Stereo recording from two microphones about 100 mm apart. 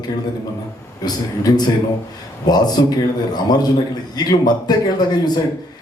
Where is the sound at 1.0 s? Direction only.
45° left (ahead or behind).